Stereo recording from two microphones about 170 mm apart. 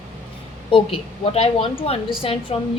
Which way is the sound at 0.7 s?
35° left (ahead or behind).